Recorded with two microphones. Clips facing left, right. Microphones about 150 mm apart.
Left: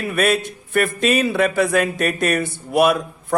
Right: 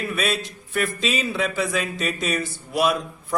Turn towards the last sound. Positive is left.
turn(degrees=55)  # may be behind; listen again after turning